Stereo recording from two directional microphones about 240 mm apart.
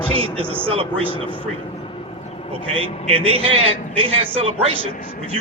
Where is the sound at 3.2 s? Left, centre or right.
Right.